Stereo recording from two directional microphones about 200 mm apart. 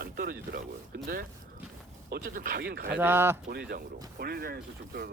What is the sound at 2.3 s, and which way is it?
Speech, 45° right (ahead or behind).